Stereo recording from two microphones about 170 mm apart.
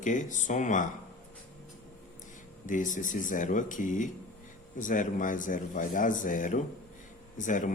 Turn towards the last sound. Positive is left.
turn(degrees=50)  # may be behind; listen again after turning